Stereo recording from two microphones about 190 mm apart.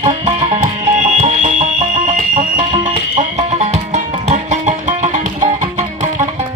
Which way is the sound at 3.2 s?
35° right (ahead or behind).